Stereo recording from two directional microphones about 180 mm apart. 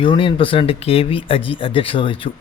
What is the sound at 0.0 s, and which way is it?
Speech, 30° left (ahead or behind).